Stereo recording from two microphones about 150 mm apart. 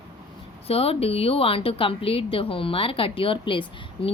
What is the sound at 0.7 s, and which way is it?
A woman's voice, 40° left (ahead or behind).